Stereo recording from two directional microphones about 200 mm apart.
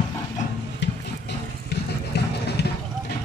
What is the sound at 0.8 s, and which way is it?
Vehicle, 55° left (ahead or behind).